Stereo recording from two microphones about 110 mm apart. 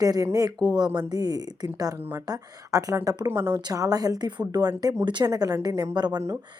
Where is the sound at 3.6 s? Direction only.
35° right (ahead or behind).